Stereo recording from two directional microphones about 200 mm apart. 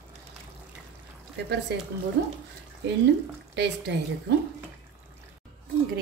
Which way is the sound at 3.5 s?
60° right (ahead or behind).